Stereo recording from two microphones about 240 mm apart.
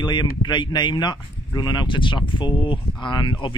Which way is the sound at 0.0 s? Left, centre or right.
Centre.